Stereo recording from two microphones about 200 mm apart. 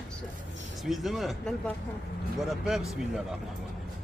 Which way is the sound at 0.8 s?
Centre (ahead or behind).